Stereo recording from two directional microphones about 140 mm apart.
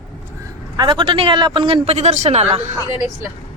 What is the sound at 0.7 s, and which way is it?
A man's voice, 35° right (ahead or behind).